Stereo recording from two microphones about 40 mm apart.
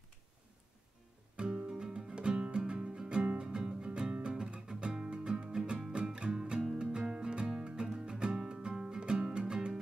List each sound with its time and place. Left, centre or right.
1.3 s music: right